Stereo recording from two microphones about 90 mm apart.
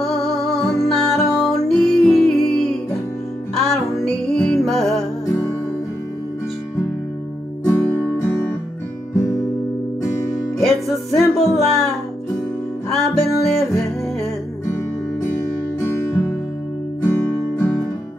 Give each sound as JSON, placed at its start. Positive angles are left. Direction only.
{"t": 0.0, "sound": "music", "side_deg": 0}
{"t": 5.2, "sound": "music", "side_deg": 30}
{"t": 7.6, "sound": "music", "side_deg": 20}
{"t": 10.1, "sound": "music", "side_deg": 40}
{"t": 10.6, "sound": "music", "side_deg": 5}
{"t": 12.9, "sound": "music", "side_deg": 0}
{"t": 15.8, "sound": "music", "side_deg": 20}